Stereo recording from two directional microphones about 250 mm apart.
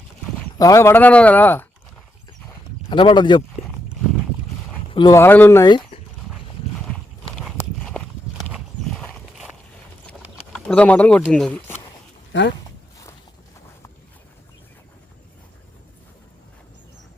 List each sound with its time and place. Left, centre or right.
0.6 s speech: centre
2.9 s speech: centre
4.9 s speech: centre
6.7 s clip-clop: centre
8.4 s horse: centre
10.7 s speech: centre
12.3 s speech: left